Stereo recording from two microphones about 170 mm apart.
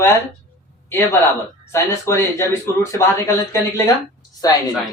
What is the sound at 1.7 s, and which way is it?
A woman's voice, 15° left (ahead or behind).